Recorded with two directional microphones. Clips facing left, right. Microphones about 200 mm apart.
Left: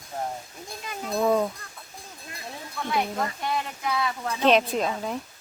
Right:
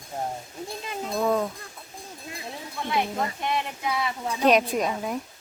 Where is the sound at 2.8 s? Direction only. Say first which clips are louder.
Even; 5° right (ahead or behind).